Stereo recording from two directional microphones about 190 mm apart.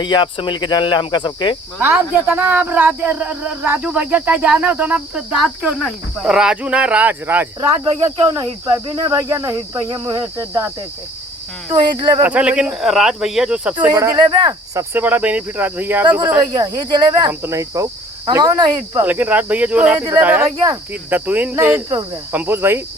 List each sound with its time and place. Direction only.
0.0 s cricket: 25° left (ahead or behind)
1.8 s a man's voice: 10° right (ahead or behind)
7.9 s cricket: 20° right (ahead or behind)
9.7 s a man's voice: 25° right (ahead or behind)
11.7 s cricket: 20° right (ahead or behind)
12.2 s speech: 5° right (ahead or behind)
13.7 s a man's voice: 20° right (ahead or behind)
18.3 s cricket: 20° right (ahead or behind)
19.0 s a man's voice: 10° right (ahead or behind)